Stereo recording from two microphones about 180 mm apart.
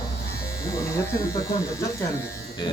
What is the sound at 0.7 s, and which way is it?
Speech, 15° left (ahead or behind).